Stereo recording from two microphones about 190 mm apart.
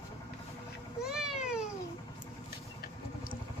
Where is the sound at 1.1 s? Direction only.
5° right (ahead or behind).